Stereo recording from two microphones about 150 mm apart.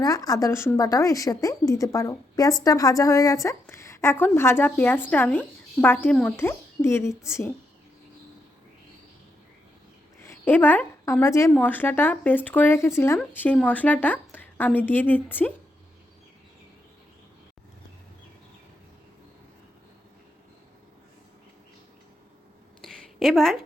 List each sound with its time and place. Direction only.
0.0 s a woman's voice: 25° left (ahead or behind)
10.2 s a woman's voice: 10° left (ahead or behind)
22.8 s a sound: 5° left (ahead or behind)